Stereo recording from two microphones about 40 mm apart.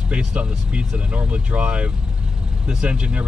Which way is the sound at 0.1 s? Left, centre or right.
Right.